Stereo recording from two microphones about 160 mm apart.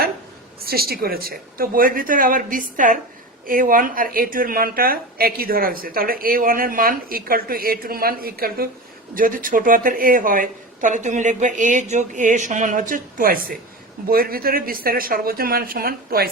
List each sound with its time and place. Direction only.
0.6 s a woman's voice: 70° right (ahead or behind)